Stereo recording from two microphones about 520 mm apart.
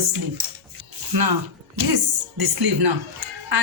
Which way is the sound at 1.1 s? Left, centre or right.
Right.